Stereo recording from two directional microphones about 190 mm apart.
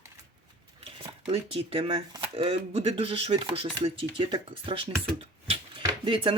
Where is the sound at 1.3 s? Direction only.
30° right (ahead or behind).